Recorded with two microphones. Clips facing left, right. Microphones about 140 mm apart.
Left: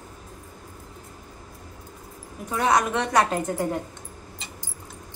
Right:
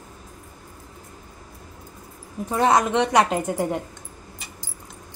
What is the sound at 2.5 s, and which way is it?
A woman's voice, 25° right (ahead or behind).